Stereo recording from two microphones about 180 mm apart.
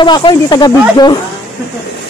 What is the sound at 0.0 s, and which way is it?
A woman's voice, 25° left (ahead or behind).